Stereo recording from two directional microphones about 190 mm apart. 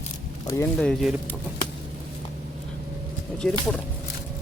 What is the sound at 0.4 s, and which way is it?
Speech, 15° left (ahead or behind).